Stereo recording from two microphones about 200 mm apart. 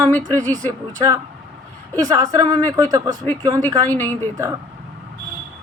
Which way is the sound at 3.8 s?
10° left (ahead or behind).